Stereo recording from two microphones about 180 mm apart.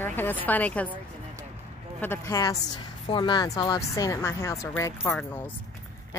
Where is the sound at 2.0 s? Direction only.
15° left (ahead or behind).